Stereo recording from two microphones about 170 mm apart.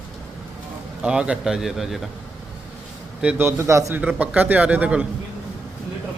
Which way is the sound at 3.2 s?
15° right (ahead or behind).